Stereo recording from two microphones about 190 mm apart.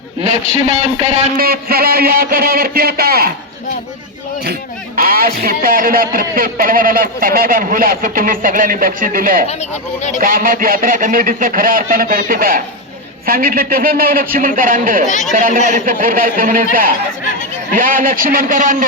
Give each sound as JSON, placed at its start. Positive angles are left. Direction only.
{"t": 0.2, "sound": "speech", "side_deg": -35}
{"t": 1.4, "sound": "speech", "side_deg": -50}
{"t": 4.9, "sound": "speech", "side_deg": -50}
{"t": 9.5, "sound": "speech", "side_deg": 35}
{"t": 10.2, "sound": "speech", "side_deg": -45}
{"t": 17.7, "sound": "speech", "side_deg": -45}